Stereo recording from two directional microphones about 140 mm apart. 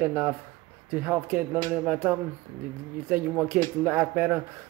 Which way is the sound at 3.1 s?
20° right (ahead or behind).